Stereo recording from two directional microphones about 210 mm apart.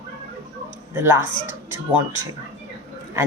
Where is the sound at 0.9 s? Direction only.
10° right (ahead or behind).